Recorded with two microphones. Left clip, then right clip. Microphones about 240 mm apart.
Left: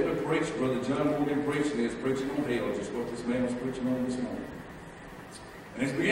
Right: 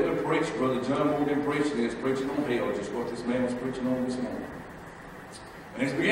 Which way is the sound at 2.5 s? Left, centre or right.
Centre.